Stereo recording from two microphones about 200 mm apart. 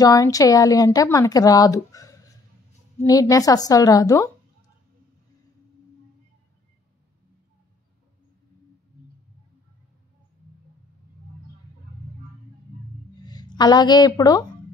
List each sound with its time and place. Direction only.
0.0 s speech: 15° left (ahead or behind)
13.2 s a woman's voice: 20° left (ahead or behind)